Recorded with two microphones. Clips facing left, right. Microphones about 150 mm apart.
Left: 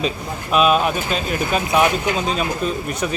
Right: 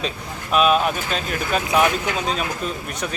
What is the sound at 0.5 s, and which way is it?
Speech, centre (ahead or behind).